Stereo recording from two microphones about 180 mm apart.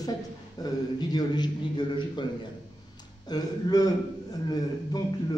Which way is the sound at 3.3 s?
20° left (ahead or behind).